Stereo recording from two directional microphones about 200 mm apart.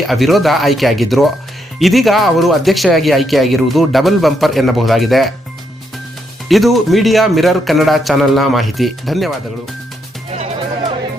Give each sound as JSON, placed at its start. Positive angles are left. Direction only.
{"t": 0.1, "sound": "speech", "side_deg": 0}
{"t": 6.5, "sound": "speech", "side_deg": 0}
{"t": 10.3, "sound": "music", "side_deg": -30}